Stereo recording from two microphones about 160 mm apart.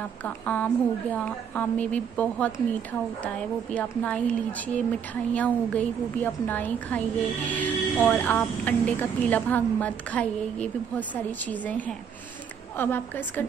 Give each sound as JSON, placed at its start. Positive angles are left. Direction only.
{"t": 0.2, "sound": "speech", "side_deg": 10}
{"t": 3.7, "sound": "speech", "side_deg": 5}